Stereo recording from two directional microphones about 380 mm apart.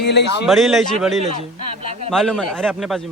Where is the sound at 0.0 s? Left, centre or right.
Left.